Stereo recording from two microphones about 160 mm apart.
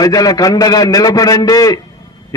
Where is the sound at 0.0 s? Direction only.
25° left (ahead or behind).